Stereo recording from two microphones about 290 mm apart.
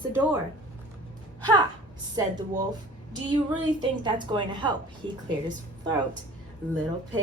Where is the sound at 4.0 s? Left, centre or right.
Centre.